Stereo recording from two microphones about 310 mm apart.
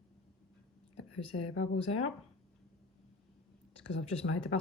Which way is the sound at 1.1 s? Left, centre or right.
Left.